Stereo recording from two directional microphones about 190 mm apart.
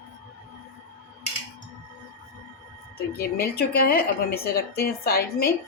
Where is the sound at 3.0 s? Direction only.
55° left (ahead or behind).